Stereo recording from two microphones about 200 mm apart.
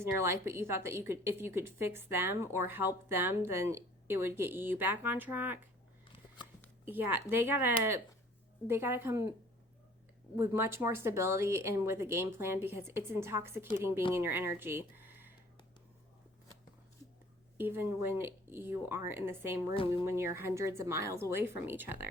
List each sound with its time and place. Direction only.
0.0 s a woman's voice: 15° right (ahead or behind)
6.8 s a woman's voice: 10° right (ahead or behind)
10.3 s a woman's voice: 10° right (ahead or behind)
17.6 s a woman's voice: 10° right (ahead or behind)
19.7 s speech: 25° left (ahead or behind)
20.1 s a woman's voice: 10° right (ahead or behind)